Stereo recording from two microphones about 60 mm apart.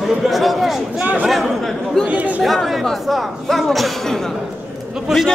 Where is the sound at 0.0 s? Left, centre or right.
Centre.